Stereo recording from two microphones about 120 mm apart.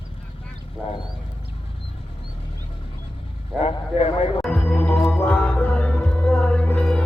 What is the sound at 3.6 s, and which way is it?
Speech, 55° left (ahead or behind).